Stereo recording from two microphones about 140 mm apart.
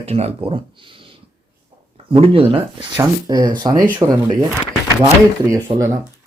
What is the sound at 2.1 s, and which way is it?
Speech, 40° right (ahead or behind).